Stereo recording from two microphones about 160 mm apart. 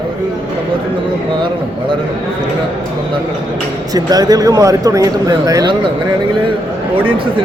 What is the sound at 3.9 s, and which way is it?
Speech, 25° right (ahead or behind).